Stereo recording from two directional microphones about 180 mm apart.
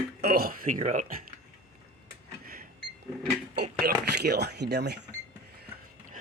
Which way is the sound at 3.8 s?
60° right (ahead or behind).